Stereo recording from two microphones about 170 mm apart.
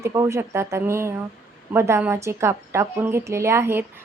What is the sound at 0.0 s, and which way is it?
A woman's voice, 15° right (ahead or behind).